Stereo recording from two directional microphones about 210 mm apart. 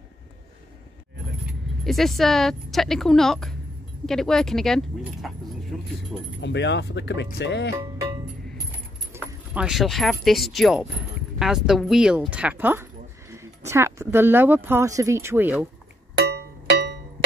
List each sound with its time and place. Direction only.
1.9 s speech: centre (ahead or behind)
6.4 s speech: 55° left (ahead or behind)
9.1 s speech: 5° right (ahead or behind)
16.2 s music: 55° right (ahead or behind)